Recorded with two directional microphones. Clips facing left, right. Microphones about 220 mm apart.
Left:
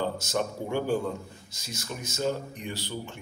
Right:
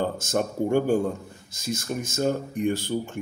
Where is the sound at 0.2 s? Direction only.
50° right (ahead or behind).